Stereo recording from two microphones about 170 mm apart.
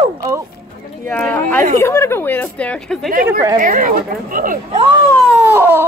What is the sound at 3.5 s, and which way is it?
Speech, 50° right (ahead or behind).